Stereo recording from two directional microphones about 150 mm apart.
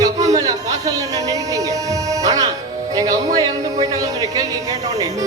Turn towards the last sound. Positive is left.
turn(degrees=-25)  # may be behind; listen again after turning